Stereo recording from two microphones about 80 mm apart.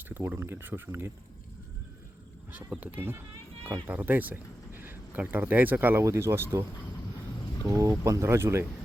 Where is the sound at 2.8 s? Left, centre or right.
Right.